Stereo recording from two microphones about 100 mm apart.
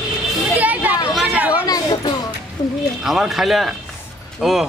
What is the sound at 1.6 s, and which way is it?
Speech, 40° left (ahead or behind).